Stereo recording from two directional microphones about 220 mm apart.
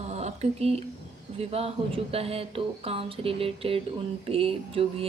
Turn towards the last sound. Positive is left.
turn(degrees=-25)  # may be behind; listen again after turning